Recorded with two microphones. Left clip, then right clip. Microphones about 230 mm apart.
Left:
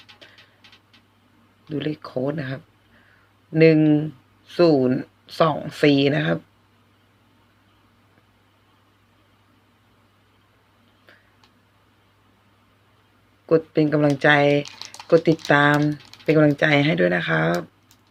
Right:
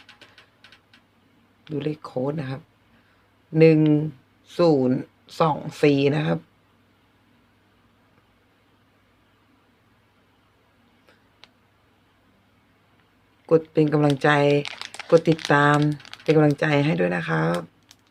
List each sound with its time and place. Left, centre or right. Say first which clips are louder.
1.7 s speech: left 1 dB; centre
13.5 s speech: even; centre
15.9 s typing: even; centre
16.4 s speech: left 5 dB; centre